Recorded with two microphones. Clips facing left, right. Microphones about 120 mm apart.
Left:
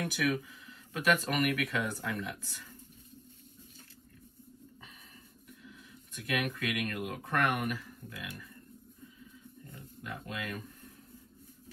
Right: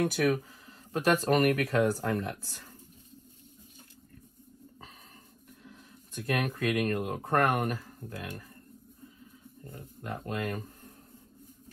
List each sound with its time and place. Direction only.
0.3 s speech: 40° right (ahead or behind)
6.2 s speech: 30° right (ahead or behind)
10.0 s speech: 35° right (ahead or behind)